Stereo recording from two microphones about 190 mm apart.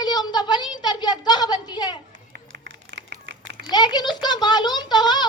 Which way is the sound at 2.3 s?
60° right (ahead or behind).